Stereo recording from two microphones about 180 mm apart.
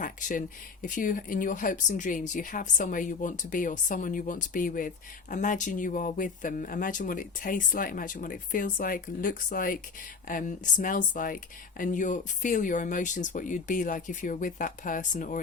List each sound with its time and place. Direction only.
0.0 s speech: 45° left (ahead or behind)